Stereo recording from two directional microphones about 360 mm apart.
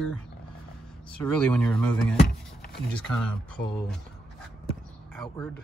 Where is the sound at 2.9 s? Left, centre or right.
Centre.